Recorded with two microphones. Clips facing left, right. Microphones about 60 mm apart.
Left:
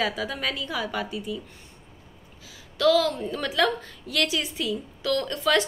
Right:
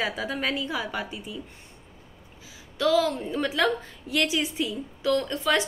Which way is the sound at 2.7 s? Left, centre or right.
Right.